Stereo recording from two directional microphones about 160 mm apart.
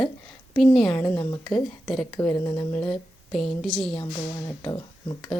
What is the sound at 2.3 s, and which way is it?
Speech, 25° left (ahead or behind).